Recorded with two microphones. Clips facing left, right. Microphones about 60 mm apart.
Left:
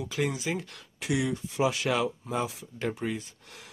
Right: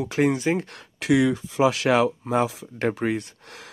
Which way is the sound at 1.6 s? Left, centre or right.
Right.